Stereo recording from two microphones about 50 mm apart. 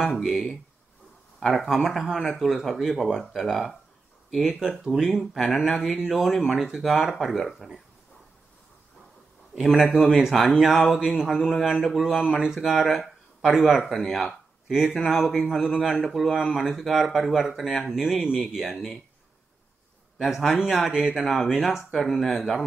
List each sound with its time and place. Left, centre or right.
0.0 s speech: centre
1.7 s speech: centre
9.6 s speech: centre
20.2 s speech: centre